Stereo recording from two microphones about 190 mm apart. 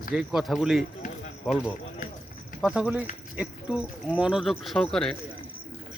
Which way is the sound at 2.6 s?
5° right (ahead or behind).